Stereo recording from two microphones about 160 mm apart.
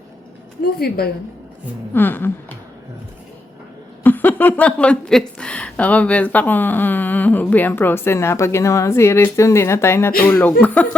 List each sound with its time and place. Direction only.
0.6 s a woman's voice: 75° left (ahead or behind)
1.9 s speech: 10° left (ahead or behind)
4.0 s speech: 10° left (ahead or behind)